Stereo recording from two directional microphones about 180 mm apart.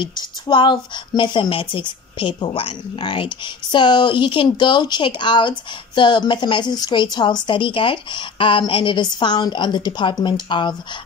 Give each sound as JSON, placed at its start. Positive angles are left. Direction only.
{"t": 0.0, "sound": "a woman's voice", "side_deg": 25}